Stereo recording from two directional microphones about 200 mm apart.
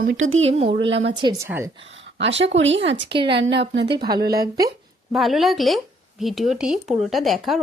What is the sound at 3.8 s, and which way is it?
Speech, 20° right (ahead or behind).